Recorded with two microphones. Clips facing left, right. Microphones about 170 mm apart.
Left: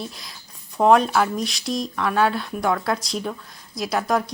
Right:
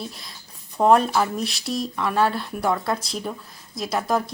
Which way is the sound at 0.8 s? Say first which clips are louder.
Left 1 dB; centre (ahead or behind).